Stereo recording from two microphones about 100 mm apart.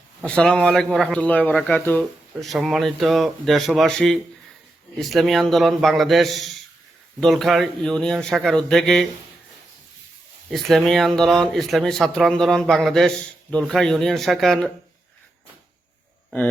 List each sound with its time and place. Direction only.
0.3 s speech: 10° left (ahead or behind)
1.1 s speech: 15° left (ahead or behind)
2.4 s speech: centre (ahead or behind)
10.5 s speech: centre (ahead or behind)